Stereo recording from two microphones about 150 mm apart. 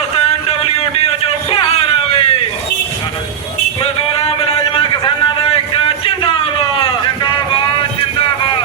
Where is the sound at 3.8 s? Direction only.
40° left (ahead or behind).